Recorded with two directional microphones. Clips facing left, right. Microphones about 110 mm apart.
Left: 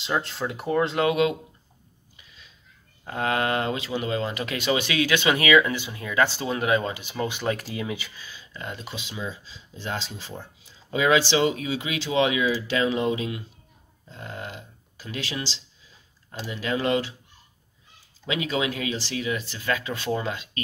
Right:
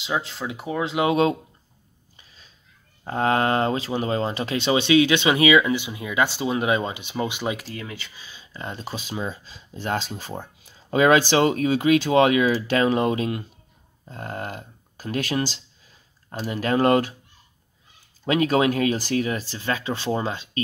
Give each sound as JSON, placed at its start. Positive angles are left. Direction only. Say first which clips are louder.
{"t": 0.0, "sound": "speech", "louder": "even", "side_deg": 0}
{"t": 1.0, "sound": "speech", "louder": "right 5 dB", "side_deg": -35}
{"t": 2.1, "sound": "a sound", "louder": "even", "side_deg": -35}
{"t": 3.0, "sound": "speech", "louder": "right 4 dB", "side_deg": -35}
{"t": 7.6, "sound": "speech", "louder": "left 4 dB", "side_deg": 15}
{"t": 8.2, "sound": "speech", "louder": "right 2 dB", "side_deg": -25}
{"t": 18.2, "sound": "speech", "louder": "right 7 dB", "side_deg": -50}